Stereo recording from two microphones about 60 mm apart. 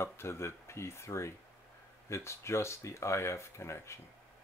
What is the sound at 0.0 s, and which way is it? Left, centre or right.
Speech, left.